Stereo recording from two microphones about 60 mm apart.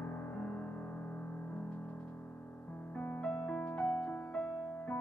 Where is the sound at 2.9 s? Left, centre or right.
Left.